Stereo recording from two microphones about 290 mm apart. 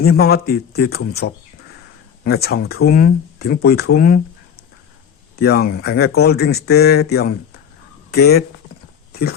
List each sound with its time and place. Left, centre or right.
0.0 s speech: left
5.4 s speech: left